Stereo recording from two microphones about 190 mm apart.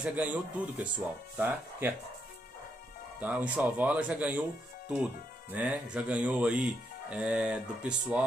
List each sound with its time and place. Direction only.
0.0 s speech: 10° right (ahead or behind)
3.2 s speech: 5° right (ahead or behind)